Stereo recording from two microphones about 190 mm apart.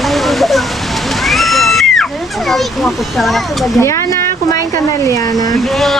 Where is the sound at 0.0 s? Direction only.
Centre (ahead or behind).